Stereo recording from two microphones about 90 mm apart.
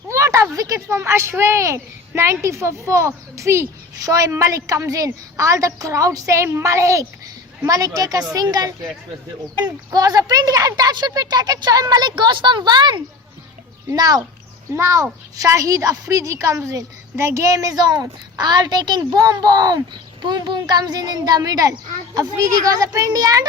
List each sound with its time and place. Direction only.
0.1 s a sound: 35° right (ahead or behind)
0.5 s a woman's voice: 40° right (ahead or behind)
14.7 s a woman's voice: 30° right (ahead or behind)